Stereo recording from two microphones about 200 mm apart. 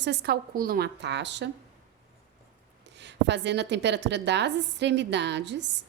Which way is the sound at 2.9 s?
60° right (ahead or behind).